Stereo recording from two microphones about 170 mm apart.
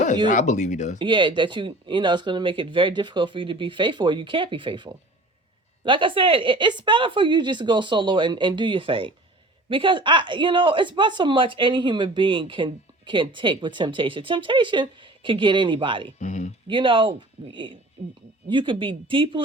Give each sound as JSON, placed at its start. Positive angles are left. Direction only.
{"t": 0.3, "sound": "speech", "side_deg": 45}
{"t": 0.9, "sound": "speech", "side_deg": -30}
{"t": 16.1, "sound": "speech", "side_deg": 45}
{"t": 16.6, "sound": "speech", "side_deg": -30}